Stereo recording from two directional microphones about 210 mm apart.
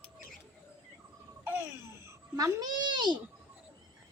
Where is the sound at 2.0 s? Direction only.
15° right (ahead or behind).